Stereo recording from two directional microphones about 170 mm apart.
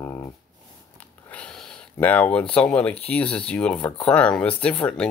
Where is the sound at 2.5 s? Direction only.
5° left (ahead or behind).